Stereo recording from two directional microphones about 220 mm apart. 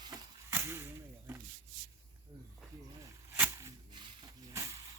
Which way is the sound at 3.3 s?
10° right (ahead or behind).